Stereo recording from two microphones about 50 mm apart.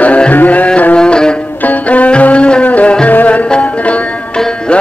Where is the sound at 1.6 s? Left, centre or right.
Left.